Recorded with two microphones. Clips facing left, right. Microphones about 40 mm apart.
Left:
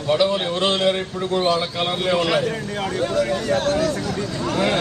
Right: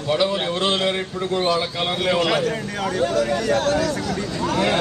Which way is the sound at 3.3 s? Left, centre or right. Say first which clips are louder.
Right 1 dB; right.